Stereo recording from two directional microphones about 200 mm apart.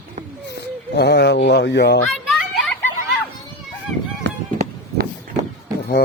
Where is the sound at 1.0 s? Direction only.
55° left (ahead or behind).